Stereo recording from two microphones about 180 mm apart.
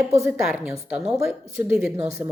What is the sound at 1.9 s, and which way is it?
Speech, 15° right (ahead or behind).